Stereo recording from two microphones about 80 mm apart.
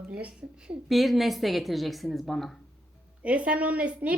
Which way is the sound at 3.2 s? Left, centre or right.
Centre.